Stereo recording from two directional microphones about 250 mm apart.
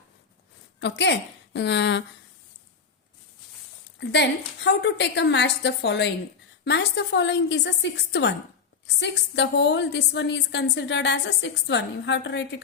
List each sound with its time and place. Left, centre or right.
0.8 s a woman's voice: left
4.1 s a woman's voice: left